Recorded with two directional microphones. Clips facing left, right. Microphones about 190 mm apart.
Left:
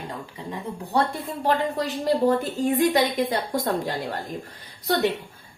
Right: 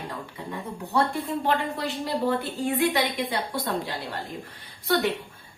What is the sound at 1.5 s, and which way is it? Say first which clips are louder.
A woman's voice: left 6 dB; 40° left (ahead or behind).